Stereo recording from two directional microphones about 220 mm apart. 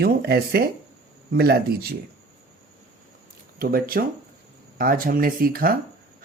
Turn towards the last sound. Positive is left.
turn(degrees=-40)  # may be behind; listen again after turning